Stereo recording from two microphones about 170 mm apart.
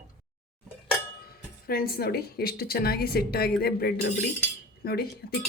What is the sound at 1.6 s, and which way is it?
Speech, 60° left (ahead or behind).